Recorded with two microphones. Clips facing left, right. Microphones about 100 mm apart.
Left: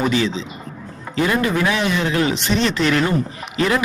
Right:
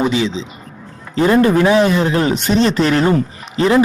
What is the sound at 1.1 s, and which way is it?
A man's voice, 35° right (ahead or behind).